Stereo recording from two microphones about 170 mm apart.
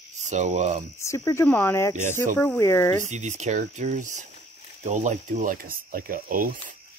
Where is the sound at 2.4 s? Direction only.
15° left (ahead or behind).